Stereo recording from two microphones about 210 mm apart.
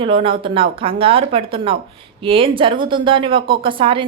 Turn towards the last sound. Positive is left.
turn(degrees=-25)  # may be behind; listen again after turning